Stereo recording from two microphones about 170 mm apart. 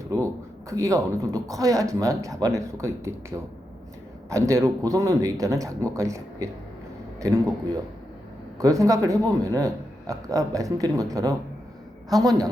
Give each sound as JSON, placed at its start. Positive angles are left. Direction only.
{"t": 0.1, "sound": "a man's voice", "side_deg": -20}